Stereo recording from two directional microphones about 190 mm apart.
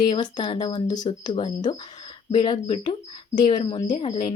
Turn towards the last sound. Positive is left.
turn(degrees=25)  # may be behind; listen again after turning